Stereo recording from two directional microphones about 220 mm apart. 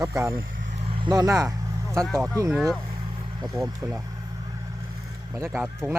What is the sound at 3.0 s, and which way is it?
Vehicle, 20° right (ahead or behind).